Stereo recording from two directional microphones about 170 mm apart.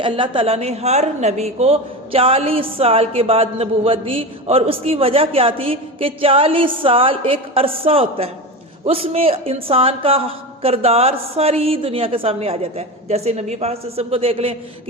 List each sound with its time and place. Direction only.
0.0 s a woman's voice: 30° right (ahead or behind)